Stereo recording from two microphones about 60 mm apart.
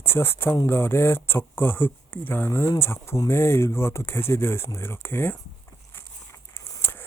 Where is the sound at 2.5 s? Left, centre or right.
Left.